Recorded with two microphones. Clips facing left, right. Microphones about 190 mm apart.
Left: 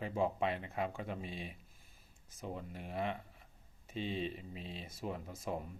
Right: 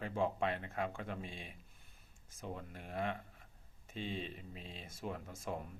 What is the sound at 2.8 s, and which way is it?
Speech, 45° right (ahead or behind).